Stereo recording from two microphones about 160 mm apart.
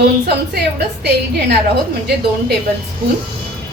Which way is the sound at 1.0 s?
90° right.